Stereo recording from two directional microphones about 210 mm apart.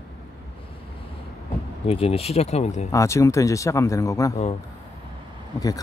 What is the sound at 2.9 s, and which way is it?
Speech, 15° left (ahead or behind).